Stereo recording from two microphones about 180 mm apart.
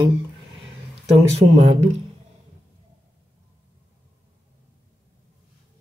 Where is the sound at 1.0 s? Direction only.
35° right (ahead or behind).